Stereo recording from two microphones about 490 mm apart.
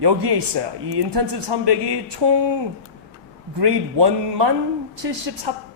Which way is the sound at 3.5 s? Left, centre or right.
Right.